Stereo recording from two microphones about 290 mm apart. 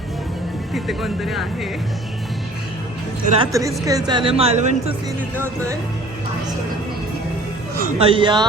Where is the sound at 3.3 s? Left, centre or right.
Centre.